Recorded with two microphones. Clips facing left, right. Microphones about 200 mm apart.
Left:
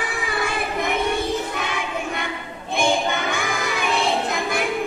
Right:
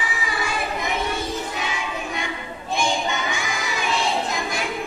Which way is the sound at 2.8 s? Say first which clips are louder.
Left 4 dB; 60° left (ahead or behind).